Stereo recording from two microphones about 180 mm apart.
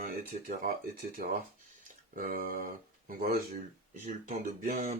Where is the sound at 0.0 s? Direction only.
55° right (ahead or behind).